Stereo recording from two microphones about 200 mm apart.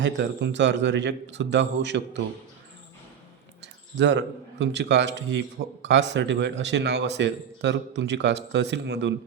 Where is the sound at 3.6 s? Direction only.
60° right (ahead or behind).